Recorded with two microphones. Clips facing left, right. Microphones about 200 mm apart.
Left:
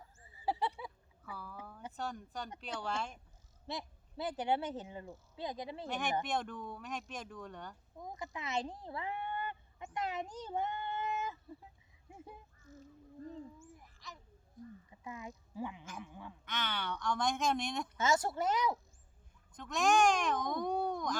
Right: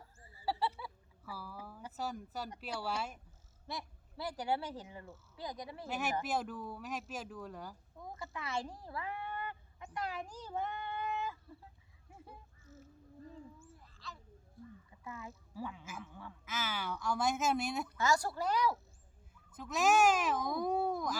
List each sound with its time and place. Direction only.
0.3 s a sound: 20° left (ahead or behind)
1.2 s speech: 5° right (ahead or behind)
3.7 s speech: 20° left (ahead or behind)
5.9 s speech: 5° right (ahead or behind)
7.9 s a sound: 15° left (ahead or behind)
13.3 s owl: 15° left (ahead or behind)
14.8 s speech: 15° left (ahead or behind)
16.0 s goose: 15° left (ahead or behind)
16.5 s speech: 5° right (ahead or behind)
17.8 s speech: 20° left (ahead or behind)
19.5 s speech: 5° right (ahead or behind)